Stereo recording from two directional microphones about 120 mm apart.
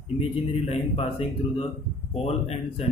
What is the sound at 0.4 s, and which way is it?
Speech, 55° left (ahead or behind).